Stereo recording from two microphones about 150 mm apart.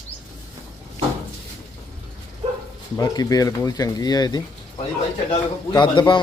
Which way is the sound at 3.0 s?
25° left (ahead or behind).